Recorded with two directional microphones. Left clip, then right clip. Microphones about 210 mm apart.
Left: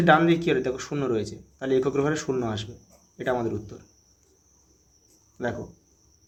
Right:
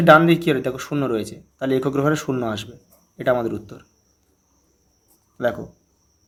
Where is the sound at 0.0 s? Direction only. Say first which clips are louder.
Right 6 dB; 30° right (ahead or behind).